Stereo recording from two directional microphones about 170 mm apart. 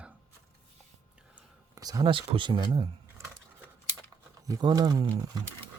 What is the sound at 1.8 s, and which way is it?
Speech, 20° right (ahead or behind).